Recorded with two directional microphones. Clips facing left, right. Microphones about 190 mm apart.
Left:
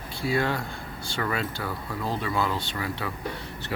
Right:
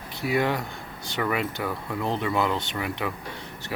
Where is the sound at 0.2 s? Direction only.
20° right (ahead or behind).